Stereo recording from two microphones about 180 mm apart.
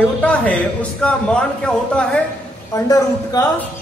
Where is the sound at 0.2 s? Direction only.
5° left (ahead or behind).